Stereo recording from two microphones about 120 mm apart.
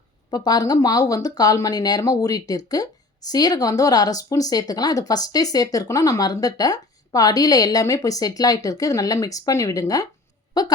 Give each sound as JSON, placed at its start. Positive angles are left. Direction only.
{"t": 0.3, "sound": "speech", "side_deg": 35}